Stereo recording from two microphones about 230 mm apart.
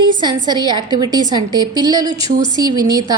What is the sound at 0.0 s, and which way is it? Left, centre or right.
A woman's voice, centre.